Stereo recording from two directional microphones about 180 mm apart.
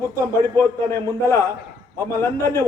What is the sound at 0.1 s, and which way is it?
A man's voice, 15° left (ahead or behind).